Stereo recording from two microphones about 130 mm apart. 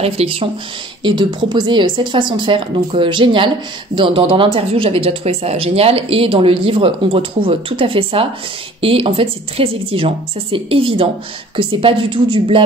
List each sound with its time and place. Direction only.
0.0 s speech: 50° right (ahead or behind)
1.0 s speech: 35° right (ahead or behind)